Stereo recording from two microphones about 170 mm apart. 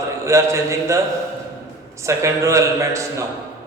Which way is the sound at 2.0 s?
15° right (ahead or behind).